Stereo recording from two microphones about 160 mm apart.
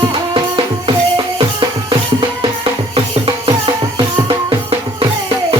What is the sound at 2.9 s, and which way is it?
Music, 35° right (ahead or behind).